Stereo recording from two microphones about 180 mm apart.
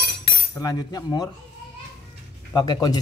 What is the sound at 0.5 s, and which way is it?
Speech, 20° left (ahead or behind).